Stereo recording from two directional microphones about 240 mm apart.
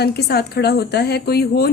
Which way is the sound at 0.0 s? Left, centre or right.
Left.